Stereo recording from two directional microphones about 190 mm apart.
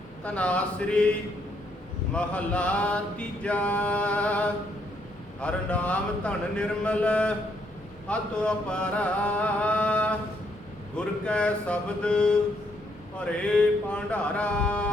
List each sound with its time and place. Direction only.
0.3 s mantra: 5° left (ahead or behind)
2.1 s mantra: 5° left (ahead or behind)
5.4 s speech: 5° left (ahead or behind)
8.0 s mantra: 5° left (ahead or behind)
10.9 s speech: 5° left (ahead or behind)
13.1 s mantra: 5° left (ahead or behind)